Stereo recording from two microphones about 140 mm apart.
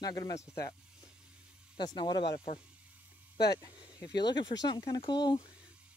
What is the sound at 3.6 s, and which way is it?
Speech, 30° left (ahead or behind).